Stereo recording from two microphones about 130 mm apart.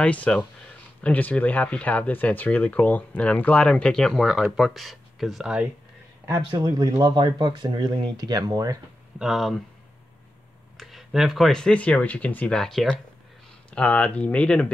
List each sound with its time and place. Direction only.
0.0 s speech: 10° left (ahead or behind)
6.5 s speech: 35° right (ahead or behind)
9.2 s speech: centre (ahead or behind)
10.8 s speech: centre (ahead or behind)